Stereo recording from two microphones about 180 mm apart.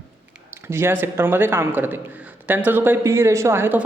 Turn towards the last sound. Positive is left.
turn(degrees=-15)  # may be behind; listen again after turning